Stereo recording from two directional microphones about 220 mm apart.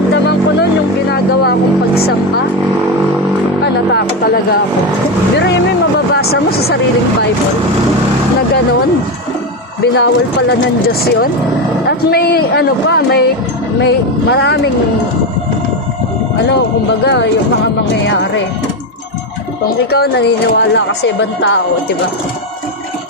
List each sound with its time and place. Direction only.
1.1 s vehicle: 45° left (ahead or behind)
3.9 s a sound: 45° left (ahead or behind)
6.1 s speech: 45° left (ahead or behind)
9.8 s speech: 50° left (ahead or behind)
17.1 s speech: 50° left (ahead or behind)
19.9 s speech: 45° left (ahead or behind)